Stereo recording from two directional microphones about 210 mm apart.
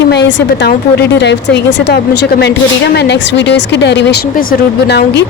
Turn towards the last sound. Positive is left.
turn(degrees=55)  # may be behind; listen again after turning